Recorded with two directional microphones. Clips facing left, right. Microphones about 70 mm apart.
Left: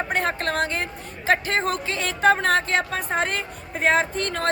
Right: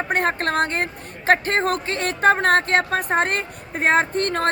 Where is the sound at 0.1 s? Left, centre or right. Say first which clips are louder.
Right 6 dB; right.